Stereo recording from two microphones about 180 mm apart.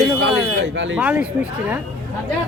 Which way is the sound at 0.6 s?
90° right.